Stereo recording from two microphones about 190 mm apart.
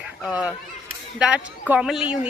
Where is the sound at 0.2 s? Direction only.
5° right (ahead or behind).